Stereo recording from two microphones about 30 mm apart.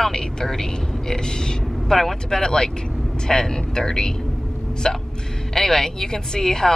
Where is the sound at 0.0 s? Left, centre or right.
Centre.